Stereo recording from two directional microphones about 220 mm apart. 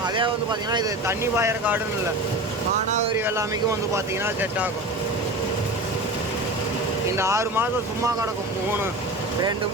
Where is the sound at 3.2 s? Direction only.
10° right (ahead or behind).